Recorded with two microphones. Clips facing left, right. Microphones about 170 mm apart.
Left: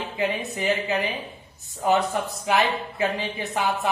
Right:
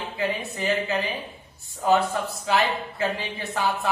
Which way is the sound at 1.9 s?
15° left (ahead or behind).